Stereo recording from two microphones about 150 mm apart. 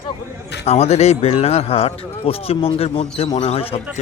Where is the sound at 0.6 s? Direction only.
45° left (ahead or behind).